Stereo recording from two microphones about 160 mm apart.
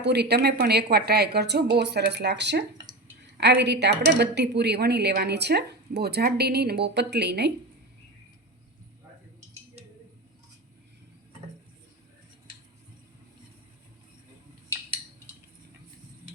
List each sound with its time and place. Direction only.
0.0 s a woman's voice: 90° right